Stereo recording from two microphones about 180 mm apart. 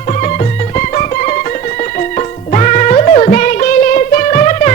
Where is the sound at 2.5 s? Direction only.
40° left (ahead or behind).